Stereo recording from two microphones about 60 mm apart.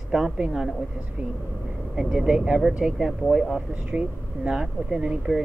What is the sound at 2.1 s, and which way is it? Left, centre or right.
Speech, centre.